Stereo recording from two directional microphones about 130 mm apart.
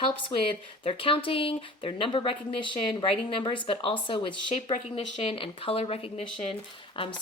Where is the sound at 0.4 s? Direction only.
45° left (ahead or behind).